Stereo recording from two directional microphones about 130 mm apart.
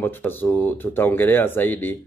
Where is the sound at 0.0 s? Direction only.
15° left (ahead or behind).